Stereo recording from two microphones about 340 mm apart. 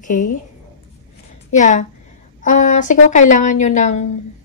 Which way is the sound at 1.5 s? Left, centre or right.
Left.